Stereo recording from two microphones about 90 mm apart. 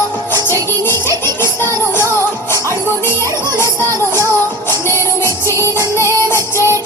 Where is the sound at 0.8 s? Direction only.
30° left (ahead or behind).